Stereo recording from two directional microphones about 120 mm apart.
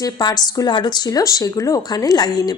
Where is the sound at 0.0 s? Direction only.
35° left (ahead or behind).